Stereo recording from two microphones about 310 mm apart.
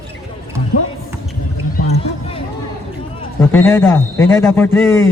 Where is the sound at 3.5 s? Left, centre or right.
Centre.